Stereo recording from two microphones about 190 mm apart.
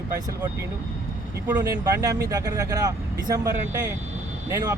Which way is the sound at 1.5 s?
20° right (ahead or behind).